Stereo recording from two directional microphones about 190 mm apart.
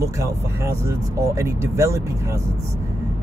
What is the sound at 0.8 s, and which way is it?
Speech, 15° right (ahead or behind).